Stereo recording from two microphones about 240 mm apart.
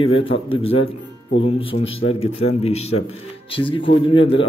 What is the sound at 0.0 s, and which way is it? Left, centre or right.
Speech, left.